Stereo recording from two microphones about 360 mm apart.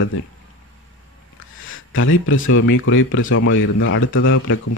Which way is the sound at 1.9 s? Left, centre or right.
Left.